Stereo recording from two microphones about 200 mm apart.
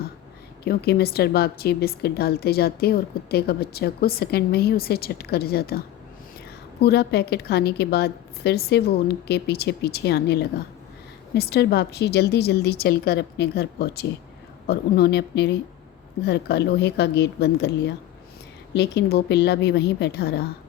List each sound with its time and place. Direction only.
0.6 s a woman's voice: 50° left (ahead or behind)
6.8 s a woman's voice: 55° left (ahead or behind)